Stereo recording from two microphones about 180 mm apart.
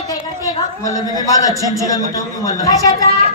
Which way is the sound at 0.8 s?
20° left (ahead or behind).